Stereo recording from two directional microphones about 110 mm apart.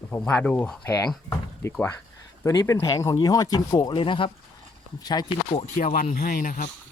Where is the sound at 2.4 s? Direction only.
30° left (ahead or behind).